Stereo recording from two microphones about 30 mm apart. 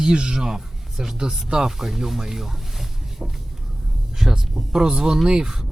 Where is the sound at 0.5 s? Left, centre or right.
Centre.